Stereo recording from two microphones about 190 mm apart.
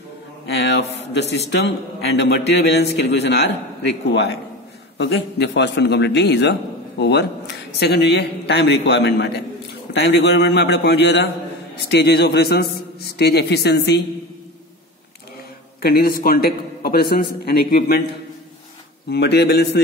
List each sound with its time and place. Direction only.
0.6 s a sound: 65° left (ahead or behind)
1.5 s speech: 65° left (ahead or behind)
4.9 s speech: 60° left (ahead or behind)
15.8 s a man's voice: 55° left (ahead or behind)
19.0 s speech: 60° left (ahead or behind)